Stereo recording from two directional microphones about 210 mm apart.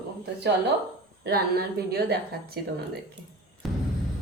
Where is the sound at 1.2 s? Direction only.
50° right (ahead or behind).